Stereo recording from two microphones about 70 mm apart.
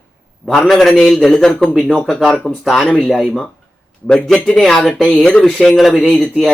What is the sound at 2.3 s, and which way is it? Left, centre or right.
Speech, left.